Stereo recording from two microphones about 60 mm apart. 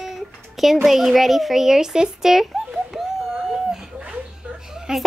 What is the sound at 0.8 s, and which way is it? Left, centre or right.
A child's voice, centre.